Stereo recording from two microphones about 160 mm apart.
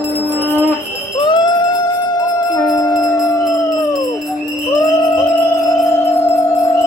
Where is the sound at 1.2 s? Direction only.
30° left (ahead or behind).